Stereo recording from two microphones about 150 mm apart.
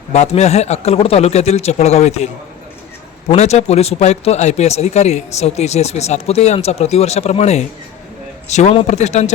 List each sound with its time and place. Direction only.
0.1 s speech: 45° left (ahead or behind)